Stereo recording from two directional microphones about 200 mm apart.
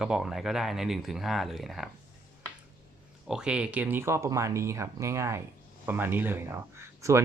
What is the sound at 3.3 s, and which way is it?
Speech, 5° right (ahead or behind).